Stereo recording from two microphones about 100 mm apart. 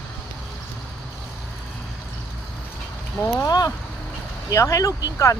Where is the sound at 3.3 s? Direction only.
35° left (ahead or behind).